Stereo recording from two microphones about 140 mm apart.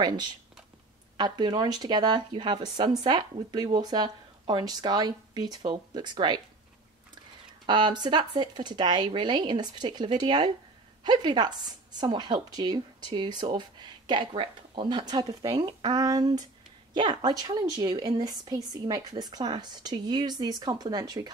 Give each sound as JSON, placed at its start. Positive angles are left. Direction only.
{"t": 1.1, "sound": "a woman's voice", "side_deg": -30}
{"t": 7.6, "sound": "a woman's voice", "side_deg": -30}